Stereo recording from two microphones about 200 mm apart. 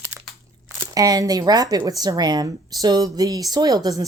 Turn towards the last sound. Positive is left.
turn(degrees=-20)  # may be behind; listen again after turning